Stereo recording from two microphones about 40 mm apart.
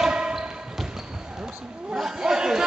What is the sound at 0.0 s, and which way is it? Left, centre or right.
Basketball bounce, right.